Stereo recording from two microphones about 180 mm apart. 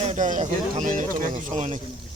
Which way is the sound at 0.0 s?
40° right (ahead or behind).